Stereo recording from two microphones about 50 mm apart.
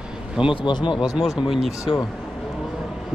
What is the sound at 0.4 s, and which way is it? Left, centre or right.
Speech, centre.